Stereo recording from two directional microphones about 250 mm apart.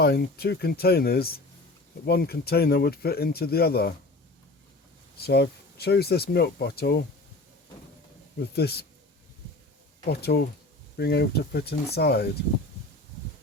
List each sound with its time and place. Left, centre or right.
0.0 s speech: left
5.2 s speech: left
8.4 s speech: left
10.1 s speech: left